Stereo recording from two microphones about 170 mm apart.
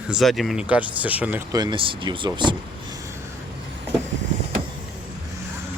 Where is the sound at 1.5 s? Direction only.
25° right (ahead or behind).